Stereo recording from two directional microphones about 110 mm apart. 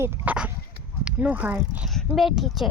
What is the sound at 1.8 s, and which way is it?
Speech, centre (ahead or behind).